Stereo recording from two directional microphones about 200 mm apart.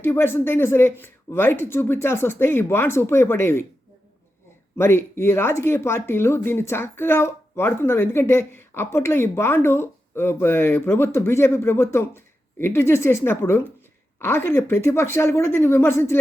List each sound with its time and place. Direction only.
0.0 s speech: 10° left (ahead or behind)
4.8 s speech: 10° left (ahead or behind)